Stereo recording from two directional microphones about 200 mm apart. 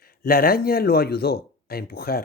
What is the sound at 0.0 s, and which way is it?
Speech, 50° left (ahead or behind).